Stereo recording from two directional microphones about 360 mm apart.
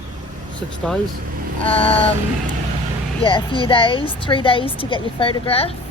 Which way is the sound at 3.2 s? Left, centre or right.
Centre.